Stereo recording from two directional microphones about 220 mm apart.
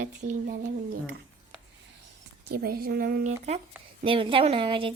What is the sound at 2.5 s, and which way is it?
Speech, 45° right (ahead or behind).